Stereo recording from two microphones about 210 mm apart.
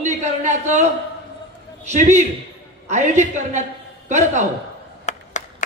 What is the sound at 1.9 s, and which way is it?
A man's voice, 35° right (ahead or behind).